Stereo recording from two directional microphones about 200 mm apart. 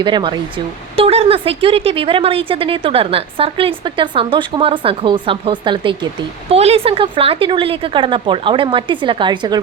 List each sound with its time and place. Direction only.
0.0 s speech: 25° right (ahead or behind)